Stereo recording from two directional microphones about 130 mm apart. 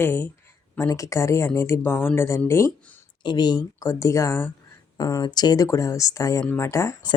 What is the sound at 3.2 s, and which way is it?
Speech, 35° left (ahead or behind).